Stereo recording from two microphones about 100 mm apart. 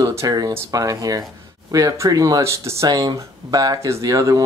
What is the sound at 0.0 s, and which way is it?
Speech, 35° right (ahead or behind).